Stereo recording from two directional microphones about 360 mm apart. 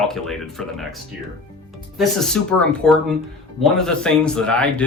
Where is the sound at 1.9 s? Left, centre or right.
Centre.